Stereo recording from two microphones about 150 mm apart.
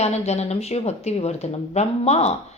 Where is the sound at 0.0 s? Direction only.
45° left (ahead or behind).